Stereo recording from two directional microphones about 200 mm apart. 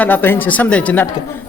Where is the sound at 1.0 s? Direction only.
15° left (ahead or behind).